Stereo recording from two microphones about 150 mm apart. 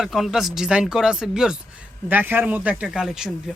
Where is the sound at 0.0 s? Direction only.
Centre (ahead or behind).